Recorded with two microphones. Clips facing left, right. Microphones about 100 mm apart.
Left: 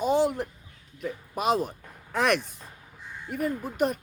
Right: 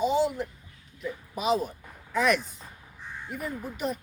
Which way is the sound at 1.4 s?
55° left (ahead or behind).